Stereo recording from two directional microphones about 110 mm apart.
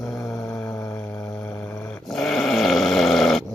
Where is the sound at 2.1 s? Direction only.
5° left (ahead or behind).